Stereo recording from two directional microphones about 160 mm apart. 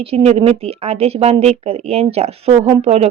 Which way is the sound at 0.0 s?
40° right (ahead or behind).